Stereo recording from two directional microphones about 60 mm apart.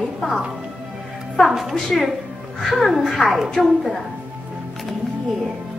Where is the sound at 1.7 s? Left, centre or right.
Centre.